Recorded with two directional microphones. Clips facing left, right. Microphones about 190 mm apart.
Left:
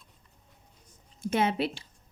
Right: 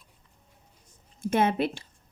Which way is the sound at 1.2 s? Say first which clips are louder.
Right 3 dB; 50° right (ahead or behind).